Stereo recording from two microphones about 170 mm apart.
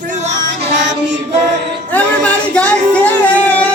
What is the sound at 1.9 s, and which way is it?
Speech, 10° left (ahead or behind).